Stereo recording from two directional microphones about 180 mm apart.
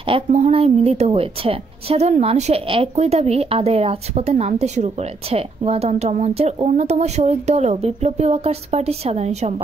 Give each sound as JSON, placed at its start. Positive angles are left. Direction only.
{"t": 0.0, "sound": "a woman's voice", "side_deg": -35}